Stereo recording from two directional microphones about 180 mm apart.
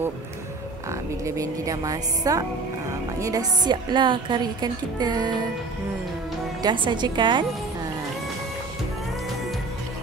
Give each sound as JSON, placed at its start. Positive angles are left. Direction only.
{"t": 1.2, "sound": "a woman's voice", "side_deg": -15}
{"t": 6.6, "sound": "a woman's voice", "side_deg": -25}